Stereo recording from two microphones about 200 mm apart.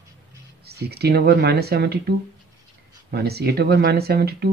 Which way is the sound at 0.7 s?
55° right (ahead or behind).